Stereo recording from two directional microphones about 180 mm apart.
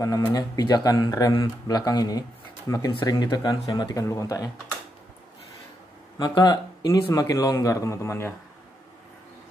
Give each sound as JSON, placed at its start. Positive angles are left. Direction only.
{"t": 0.0, "sound": "speech", "side_deg": 20}
{"t": 6.1, "sound": "speech", "side_deg": 25}